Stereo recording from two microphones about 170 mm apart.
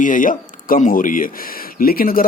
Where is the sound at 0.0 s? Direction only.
50° left (ahead or behind).